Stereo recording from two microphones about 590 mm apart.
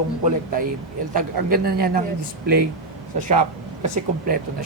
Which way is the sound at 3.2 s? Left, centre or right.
Centre.